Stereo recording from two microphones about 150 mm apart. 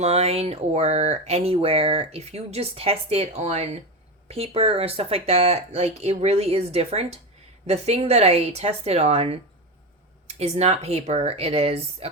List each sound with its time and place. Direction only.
0.0 s speech: 45° right (ahead or behind)